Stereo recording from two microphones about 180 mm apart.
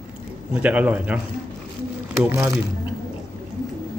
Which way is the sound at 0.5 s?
5° right (ahead or behind).